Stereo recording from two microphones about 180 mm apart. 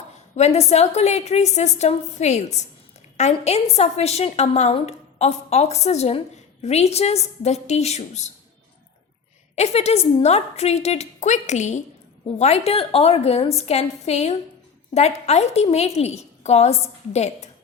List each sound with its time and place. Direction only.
0.3 s a woman's voice: 35° left (ahead or behind)
9.6 s a woman's voice: 35° left (ahead or behind)